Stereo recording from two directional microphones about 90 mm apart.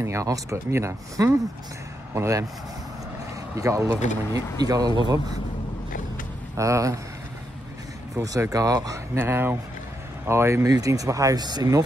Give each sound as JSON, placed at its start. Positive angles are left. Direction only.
{"t": 0.0, "sound": "speech", "side_deg": -35}
{"t": 3.5, "sound": "speech", "side_deg": -35}
{"t": 6.5, "sound": "speech", "side_deg": -35}
{"t": 8.2, "sound": "speech", "side_deg": -40}
{"t": 9.2, "sound": "speech", "side_deg": -25}